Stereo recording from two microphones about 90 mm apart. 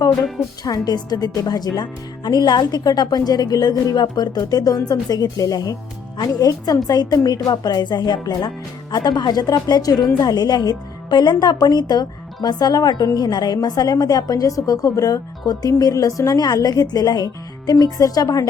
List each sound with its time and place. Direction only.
0.6 s a woman's voice: 45° left (ahead or behind)